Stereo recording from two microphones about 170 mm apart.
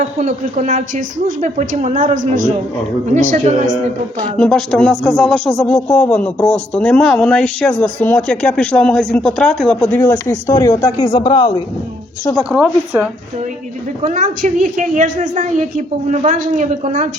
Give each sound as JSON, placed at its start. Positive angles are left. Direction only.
{"t": 0.0, "sound": "a woman's voice", "side_deg": -40}
{"t": 4.4, "sound": "speech", "side_deg": 5}
{"t": 11.0, "sound": "a man's voice", "side_deg": 30}
{"t": 12.4, "sound": "speech", "side_deg": -5}
{"t": 14.0, "sound": "a woman's voice", "side_deg": -50}